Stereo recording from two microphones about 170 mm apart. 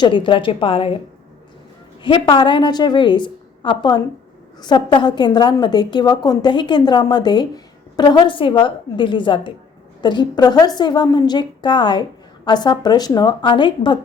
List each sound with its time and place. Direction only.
0.0 s a woman's voice: 30° left (ahead or behind)
2.0 s a woman's voice: 30° left (ahead or behind)